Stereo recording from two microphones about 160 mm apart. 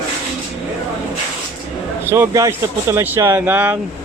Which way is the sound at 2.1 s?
15° right (ahead or behind).